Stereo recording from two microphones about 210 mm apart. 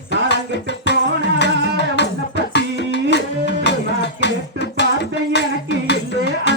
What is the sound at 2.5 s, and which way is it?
Music, 55° left (ahead or behind).